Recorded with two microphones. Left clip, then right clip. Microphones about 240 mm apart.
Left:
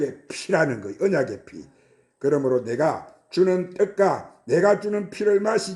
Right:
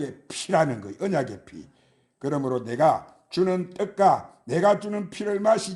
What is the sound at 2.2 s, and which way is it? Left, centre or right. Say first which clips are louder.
Speech: left 6 dB; right.